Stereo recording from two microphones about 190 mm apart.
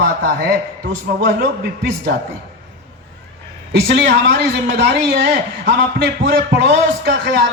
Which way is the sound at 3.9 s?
60° right (ahead or behind).